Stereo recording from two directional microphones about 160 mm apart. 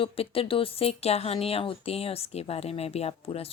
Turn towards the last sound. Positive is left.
turn(degrees=40)  # may be behind; listen again after turning